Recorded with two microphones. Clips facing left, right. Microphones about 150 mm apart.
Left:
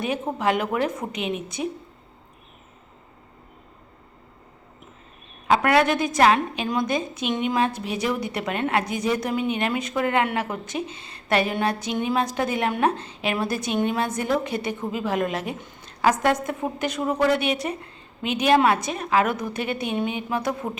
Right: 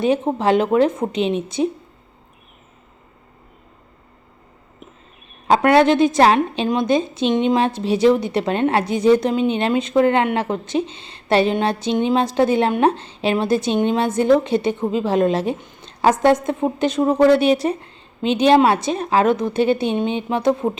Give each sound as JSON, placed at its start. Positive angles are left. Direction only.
{"t": 0.0, "sound": "a woman's voice", "side_deg": -30}
{"t": 5.5, "sound": "a woman's voice", "side_deg": -25}